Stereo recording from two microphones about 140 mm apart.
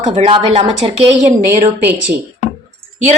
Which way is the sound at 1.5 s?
10° right (ahead or behind).